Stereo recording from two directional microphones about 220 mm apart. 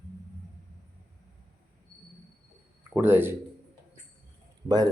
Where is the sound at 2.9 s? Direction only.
10° right (ahead or behind).